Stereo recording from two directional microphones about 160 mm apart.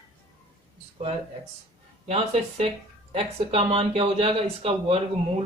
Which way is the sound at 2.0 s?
40° right (ahead or behind).